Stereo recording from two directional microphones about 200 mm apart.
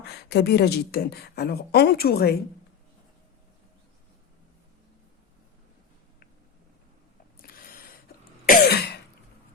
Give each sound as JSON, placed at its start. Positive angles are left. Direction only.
{"t": 0.0, "sound": "speech", "side_deg": 55}
{"t": 7.4, "sound": "a sound", "side_deg": 45}
{"t": 8.4, "sound": "cough", "side_deg": 50}